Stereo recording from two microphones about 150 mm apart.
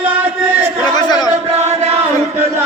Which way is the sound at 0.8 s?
30° left (ahead or behind).